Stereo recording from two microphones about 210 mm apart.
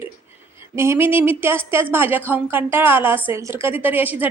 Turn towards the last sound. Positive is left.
turn(degrees=-10)  # may be behind; listen again after turning